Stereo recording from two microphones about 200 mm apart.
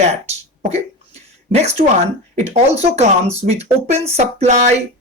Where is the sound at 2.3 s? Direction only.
30° right (ahead or behind).